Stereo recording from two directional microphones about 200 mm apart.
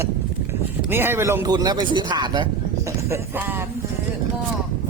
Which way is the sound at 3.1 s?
10° right (ahead or behind).